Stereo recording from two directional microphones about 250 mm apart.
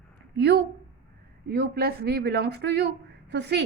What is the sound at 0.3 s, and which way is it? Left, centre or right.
A woman's voice, right.